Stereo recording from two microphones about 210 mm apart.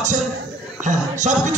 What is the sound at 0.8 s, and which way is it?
Music, 35° right (ahead or behind).